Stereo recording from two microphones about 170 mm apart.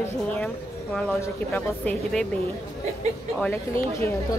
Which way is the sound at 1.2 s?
10° left (ahead or behind).